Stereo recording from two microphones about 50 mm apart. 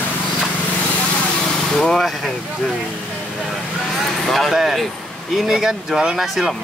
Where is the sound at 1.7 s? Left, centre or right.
Centre.